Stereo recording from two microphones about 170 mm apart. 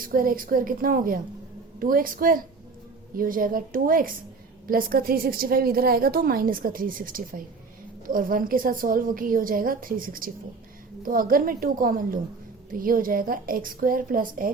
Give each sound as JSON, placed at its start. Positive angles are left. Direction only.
{"t": 0.0, "sound": "a woman's voice", "side_deg": -55}